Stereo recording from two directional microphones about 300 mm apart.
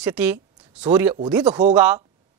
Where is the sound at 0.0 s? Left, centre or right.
Centre.